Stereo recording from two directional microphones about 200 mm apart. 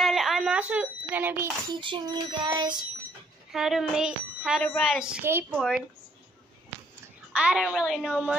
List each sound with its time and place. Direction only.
0.0 s a sound: centre (ahead or behind)
1.7 s child singing: 25° right (ahead or behind)
3.5 s speech: centre (ahead or behind)
7.3 s speech: 5° right (ahead or behind)